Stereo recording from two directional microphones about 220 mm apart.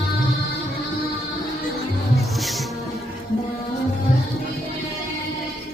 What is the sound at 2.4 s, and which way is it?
Music, centre (ahead or behind).